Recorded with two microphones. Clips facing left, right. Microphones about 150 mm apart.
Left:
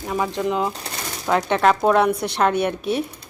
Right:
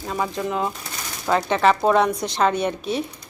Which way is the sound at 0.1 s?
20° left (ahead or behind).